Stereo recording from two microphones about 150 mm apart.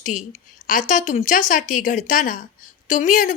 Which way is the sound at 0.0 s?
60° left (ahead or behind).